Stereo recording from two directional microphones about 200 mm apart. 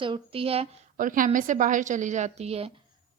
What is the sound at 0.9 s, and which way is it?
A woman's voice, 40° right (ahead or behind).